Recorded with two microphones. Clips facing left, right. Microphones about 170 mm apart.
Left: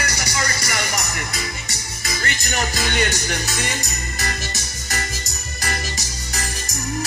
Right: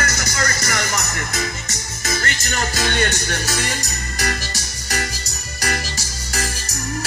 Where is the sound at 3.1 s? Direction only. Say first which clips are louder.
Right 1 dB; 20° left (ahead or behind).